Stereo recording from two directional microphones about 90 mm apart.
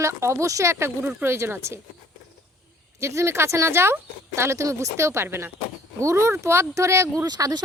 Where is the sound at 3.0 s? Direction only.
30° right (ahead or behind).